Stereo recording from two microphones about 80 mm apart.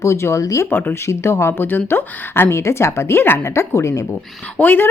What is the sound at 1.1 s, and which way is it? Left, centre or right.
Speech, left.